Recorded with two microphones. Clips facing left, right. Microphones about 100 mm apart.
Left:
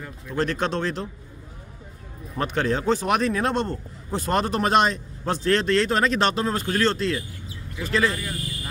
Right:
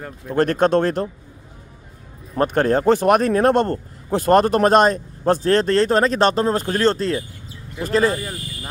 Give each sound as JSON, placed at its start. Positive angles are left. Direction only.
{"t": 0.0, "sound": "a man's voice", "side_deg": -50}
{"t": 2.3, "sound": "a man's voice", "side_deg": -45}